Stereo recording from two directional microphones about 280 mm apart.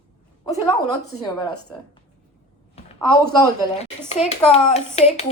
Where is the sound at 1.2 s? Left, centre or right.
Centre.